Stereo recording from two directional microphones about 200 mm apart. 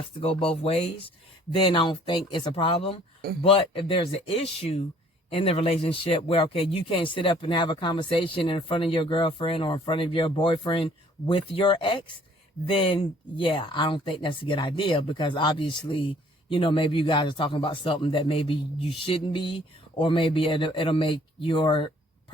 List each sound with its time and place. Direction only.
0.2 s speech: 25° left (ahead or behind)